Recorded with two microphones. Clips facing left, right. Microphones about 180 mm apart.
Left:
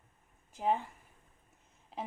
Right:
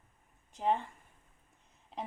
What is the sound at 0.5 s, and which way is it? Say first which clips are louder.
Speech: even; 5° left (ahead or behind).